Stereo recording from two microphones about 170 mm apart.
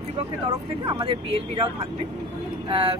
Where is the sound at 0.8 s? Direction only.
30° right (ahead or behind).